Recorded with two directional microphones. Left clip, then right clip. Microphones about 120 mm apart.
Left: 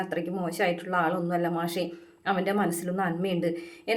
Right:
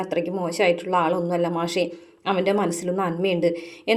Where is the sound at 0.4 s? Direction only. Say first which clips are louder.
Right 7 dB; 25° right (ahead or behind).